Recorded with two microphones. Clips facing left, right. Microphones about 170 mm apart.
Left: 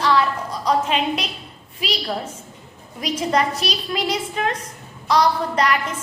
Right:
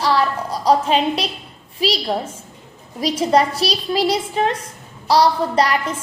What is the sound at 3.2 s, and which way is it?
A woman's voice, 35° right (ahead or behind).